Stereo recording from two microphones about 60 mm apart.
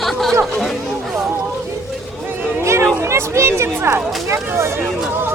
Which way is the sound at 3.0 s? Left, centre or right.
Right.